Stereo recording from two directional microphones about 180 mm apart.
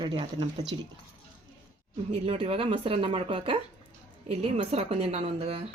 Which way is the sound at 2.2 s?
35° right (ahead or behind).